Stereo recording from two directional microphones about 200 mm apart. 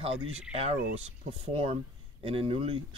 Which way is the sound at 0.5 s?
35° right (ahead or behind).